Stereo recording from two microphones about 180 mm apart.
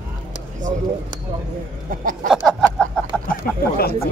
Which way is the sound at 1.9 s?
50° right (ahead or behind).